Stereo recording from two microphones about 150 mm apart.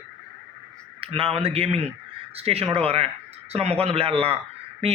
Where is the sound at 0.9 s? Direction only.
40° right (ahead or behind).